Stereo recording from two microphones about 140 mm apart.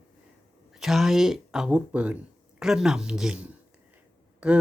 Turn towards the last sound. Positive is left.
turn(degrees=-5)  # may be behind; listen again after turning